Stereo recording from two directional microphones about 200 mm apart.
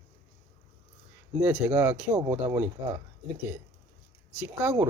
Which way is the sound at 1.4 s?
5° right (ahead or behind).